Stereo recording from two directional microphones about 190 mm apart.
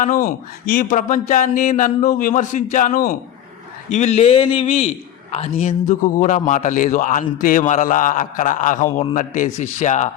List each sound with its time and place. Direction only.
0.0 s speech: 45° left (ahead or behind)